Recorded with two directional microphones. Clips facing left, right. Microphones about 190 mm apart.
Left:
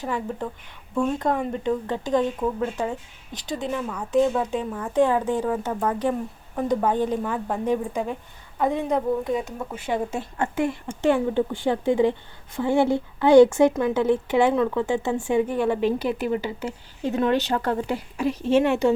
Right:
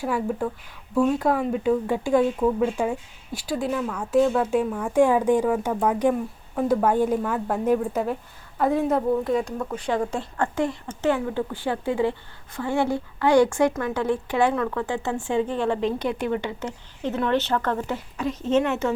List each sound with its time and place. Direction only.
0.0 s speech: 10° right (ahead or behind)
10.1 s a woman's voice: 20° left (ahead or behind)